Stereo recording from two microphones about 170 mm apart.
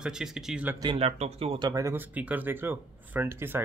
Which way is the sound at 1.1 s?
40° right (ahead or behind).